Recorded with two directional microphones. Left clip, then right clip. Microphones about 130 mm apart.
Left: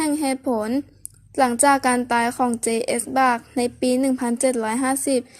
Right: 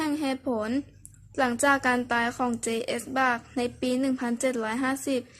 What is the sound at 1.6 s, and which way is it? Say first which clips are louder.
A woman's voice: left 4 dB; 30° left (ahead or behind).